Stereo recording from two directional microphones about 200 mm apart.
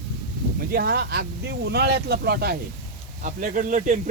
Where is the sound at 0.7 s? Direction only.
55° right (ahead or behind).